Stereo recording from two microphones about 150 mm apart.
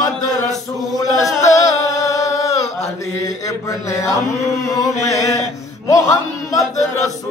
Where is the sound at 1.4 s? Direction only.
20° left (ahead or behind).